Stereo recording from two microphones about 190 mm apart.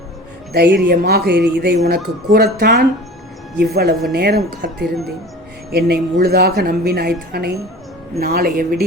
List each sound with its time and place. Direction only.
0.5 s speech: 55° right (ahead or behind)